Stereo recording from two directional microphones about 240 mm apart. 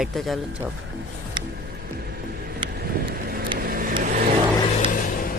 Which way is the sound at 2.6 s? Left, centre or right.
Right.